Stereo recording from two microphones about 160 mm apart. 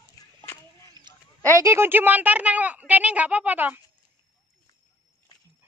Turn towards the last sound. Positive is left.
turn(degrees=-10)  # may be behind; listen again after turning